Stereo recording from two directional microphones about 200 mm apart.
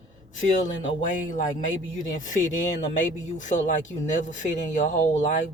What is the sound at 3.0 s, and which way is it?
Speech, 40° left (ahead or behind).